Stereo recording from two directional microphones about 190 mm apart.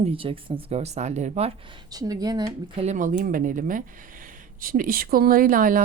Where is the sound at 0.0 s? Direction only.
30° right (ahead or behind).